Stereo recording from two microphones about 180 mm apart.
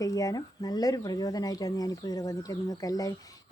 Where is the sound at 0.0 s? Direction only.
20° left (ahead or behind).